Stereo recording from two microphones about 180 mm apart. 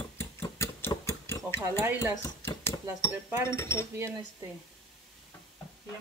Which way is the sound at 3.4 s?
15° left (ahead or behind).